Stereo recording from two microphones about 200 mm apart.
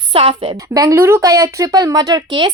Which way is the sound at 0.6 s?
15° right (ahead or behind).